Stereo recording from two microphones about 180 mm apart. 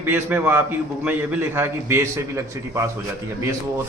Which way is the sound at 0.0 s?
10° right (ahead or behind).